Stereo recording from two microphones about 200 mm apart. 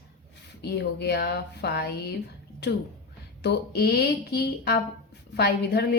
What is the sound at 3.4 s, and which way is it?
A woman's voice, 55° left (ahead or behind).